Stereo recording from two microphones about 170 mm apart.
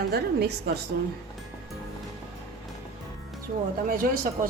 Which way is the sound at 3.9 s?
55° right (ahead or behind).